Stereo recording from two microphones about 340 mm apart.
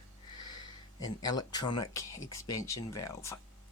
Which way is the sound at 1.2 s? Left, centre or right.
Centre.